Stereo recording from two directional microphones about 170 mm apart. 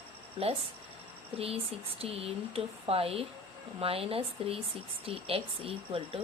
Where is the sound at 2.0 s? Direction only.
35° right (ahead or behind).